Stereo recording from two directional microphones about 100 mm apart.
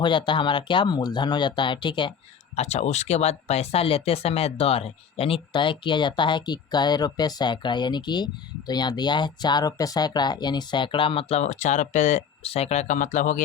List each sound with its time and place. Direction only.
0.0 s speech: 55° left (ahead or behind)
2.6 s speech: 90° left; by 5.4 s 75° left (ahead or behind)
5.5 s speech: 55° left (ahead or behind); by 12.7 s 85° left